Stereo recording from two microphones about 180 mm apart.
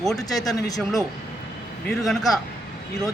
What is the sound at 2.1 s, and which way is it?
Speech, centre (ahead or behind).